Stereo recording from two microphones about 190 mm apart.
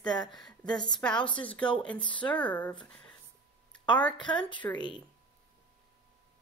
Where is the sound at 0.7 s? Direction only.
25° left (ahead or behind).